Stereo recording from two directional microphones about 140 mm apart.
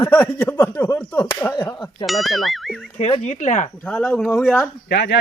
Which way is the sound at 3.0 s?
50° left (ahead or behind).